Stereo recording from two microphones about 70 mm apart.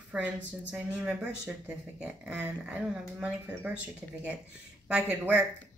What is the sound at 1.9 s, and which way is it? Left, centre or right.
Speech, centre.